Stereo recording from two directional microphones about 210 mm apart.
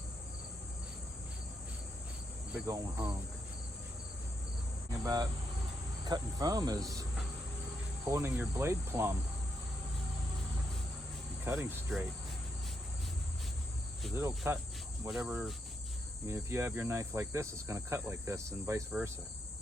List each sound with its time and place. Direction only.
2.5 s cricket: 15° right (ahead or behind)
4.9 s cricket: 15° right (ahead or behind)
8.0 s cricket: 10° right (ahead or behind)
11.4 s cricket: 10° right (ahead or behind)
14.2 s cricket: 15° right (ahead or behind)